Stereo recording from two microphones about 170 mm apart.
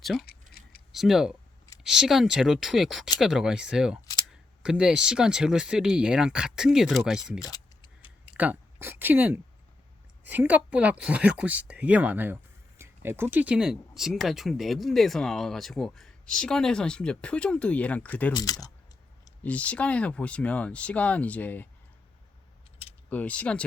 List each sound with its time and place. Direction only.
0.2 s a sound: 60° left (ahead or behind)
0.9 s speech: centre (ahead or behind)
7.4 s a sound: 25° left (ahead or behind)
8.3 s speech: 10° right (ahead or behind); by 18.3 s 10° left (ahead or behind)
18.3 s speech: 20° left (ahead or behind)
19.5 s speech: 10° left (ahead or behind)
23.0 s speech: 10° left (ahead or behind)